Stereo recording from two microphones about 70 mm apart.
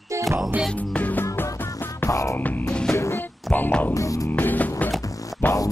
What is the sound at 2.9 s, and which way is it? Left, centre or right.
Music, left.